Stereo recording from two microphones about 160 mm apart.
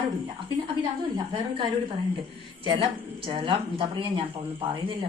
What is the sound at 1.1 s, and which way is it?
A woman's voice, 30° right (ahead or behind).